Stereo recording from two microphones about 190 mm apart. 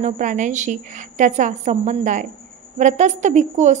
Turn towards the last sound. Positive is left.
turn(degrees=-40)  # may be behind; listen again after turning